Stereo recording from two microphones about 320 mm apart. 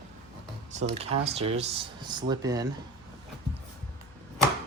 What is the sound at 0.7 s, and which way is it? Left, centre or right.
Speech, centre.